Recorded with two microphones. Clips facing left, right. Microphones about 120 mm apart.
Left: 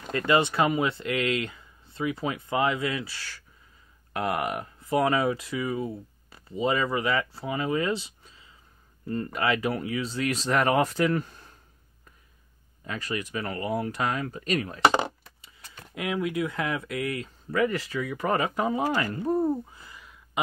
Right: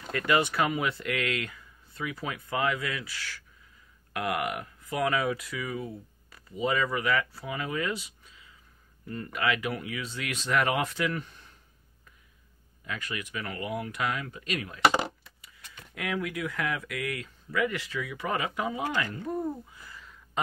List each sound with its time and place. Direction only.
0.1 s speech: 30° left (ahead or behind)
12.8 s speech: 35° left (ahead or behind)
17.5 s speech: 35° left (ahead or behind)
19.9 s a sound: 15° left (ahead or behind)